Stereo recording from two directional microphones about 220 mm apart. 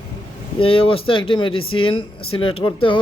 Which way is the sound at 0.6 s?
25° left (ahead or behind).